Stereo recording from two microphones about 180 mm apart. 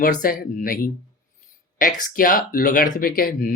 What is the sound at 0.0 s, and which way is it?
Speech, 50° left (ahead or behind).